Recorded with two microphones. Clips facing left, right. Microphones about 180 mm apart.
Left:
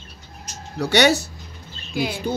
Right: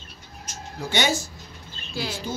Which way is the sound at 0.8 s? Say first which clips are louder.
Left 8 dB; 70° left (ahead or behind).